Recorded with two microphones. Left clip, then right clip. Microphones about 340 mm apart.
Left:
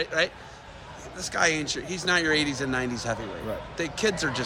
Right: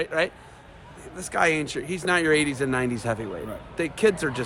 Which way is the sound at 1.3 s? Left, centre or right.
Centre.